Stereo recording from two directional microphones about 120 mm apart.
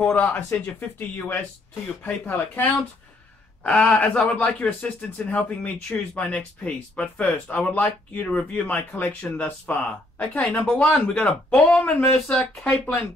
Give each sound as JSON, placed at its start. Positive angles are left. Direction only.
{"t": 0.0, "sound": "speech", "side_deg": 15}